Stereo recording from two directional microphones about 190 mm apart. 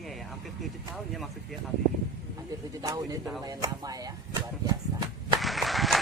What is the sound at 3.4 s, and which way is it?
Speech, 20° right (ahead or behind).